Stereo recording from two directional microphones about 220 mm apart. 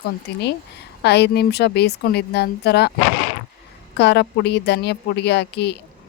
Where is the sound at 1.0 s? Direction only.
50° left (ahead or behind).